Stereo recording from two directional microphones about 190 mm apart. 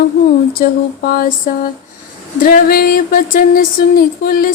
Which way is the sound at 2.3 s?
50° left (ahead or behind).